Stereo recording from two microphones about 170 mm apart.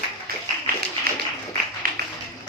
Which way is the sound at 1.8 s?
60° right (ahead or behind).